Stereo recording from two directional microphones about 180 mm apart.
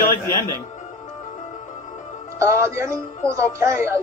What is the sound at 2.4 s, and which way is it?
Speech, 15° right (ahead or behind).